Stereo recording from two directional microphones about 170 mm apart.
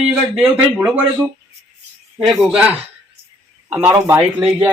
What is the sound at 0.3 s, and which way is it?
Speech, 5° right (ahead or behind).